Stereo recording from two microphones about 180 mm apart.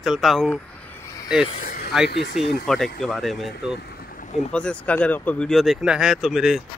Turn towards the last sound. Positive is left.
turn(degrees=-5)  # may be behind; listen again after turning